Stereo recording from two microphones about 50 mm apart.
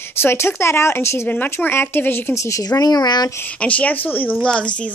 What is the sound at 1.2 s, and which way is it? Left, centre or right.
Speech, left.